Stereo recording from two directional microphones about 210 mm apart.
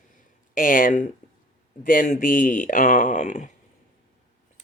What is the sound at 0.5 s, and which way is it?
Speech, 40° left (ahead or behind).